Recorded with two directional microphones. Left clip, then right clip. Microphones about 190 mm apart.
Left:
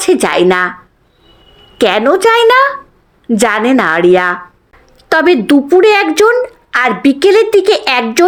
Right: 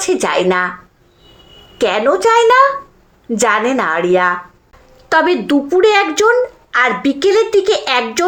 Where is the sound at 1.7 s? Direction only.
50° left (ahead or behind).